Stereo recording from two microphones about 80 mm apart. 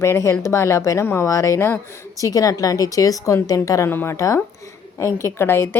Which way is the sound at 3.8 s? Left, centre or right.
Left.